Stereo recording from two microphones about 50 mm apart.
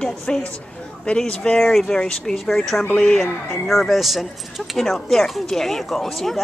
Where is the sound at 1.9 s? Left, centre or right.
Centre.